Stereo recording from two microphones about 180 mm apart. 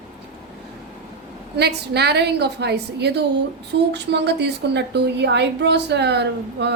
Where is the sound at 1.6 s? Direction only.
65° right (ahead or behind).